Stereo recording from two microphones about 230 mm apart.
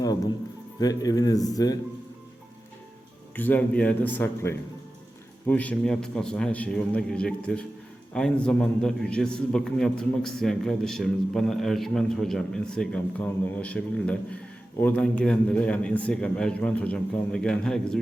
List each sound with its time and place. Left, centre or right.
0.8 s speech: centre
3.3 s a man's voice: centre